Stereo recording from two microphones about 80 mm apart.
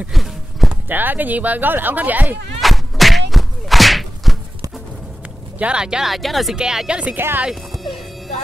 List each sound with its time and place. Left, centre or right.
0.1 s walk: centre
0.8 s speech: right
2.6 s thump: centre
5.6 s speech: centre
7.2 s speech: right
7.7 s music: centre